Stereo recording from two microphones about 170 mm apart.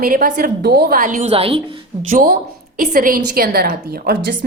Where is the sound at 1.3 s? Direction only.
35° right (ahead or behind).